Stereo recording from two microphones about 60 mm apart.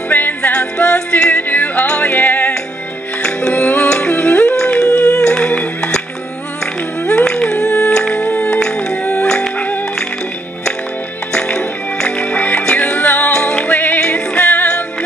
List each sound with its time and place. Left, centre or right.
0.1 s music: left
3.5 s music: left
5.1 s humming: centre
6.6 s music: centre
11.3 s music: centre